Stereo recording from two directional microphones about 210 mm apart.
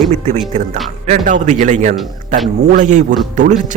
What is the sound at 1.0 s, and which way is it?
Speech, 35° right (ahead or behind).